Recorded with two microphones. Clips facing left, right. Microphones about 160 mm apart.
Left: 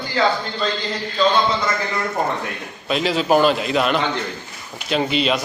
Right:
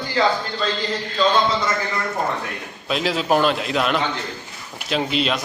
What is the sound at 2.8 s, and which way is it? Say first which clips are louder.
A man's voice: left 2 dB; centre (ahead or behind).